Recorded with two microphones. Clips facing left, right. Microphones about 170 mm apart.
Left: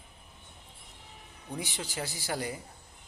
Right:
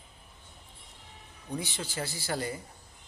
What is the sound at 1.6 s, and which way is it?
Speech, 15° left (ahead or behind).